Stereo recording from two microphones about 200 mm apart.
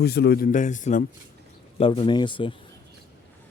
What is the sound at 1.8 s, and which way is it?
Speech, 25° left (ahead or behind).